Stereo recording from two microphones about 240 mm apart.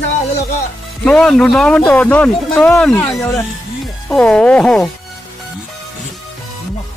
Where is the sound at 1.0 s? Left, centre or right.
Centre.